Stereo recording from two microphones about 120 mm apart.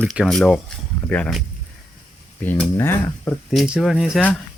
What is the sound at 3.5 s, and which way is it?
Speech, 5° right (ahead or behind).